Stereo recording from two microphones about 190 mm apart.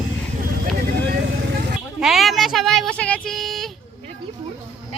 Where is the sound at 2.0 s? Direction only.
Centre (ahead or behind).